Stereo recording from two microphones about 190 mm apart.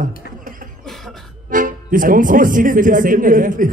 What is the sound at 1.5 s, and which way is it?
Speech, 45° right (ahead or behind).